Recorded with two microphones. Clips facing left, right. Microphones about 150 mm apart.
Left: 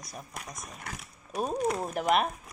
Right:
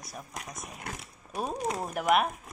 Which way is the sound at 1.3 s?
Centre (ahead or behind).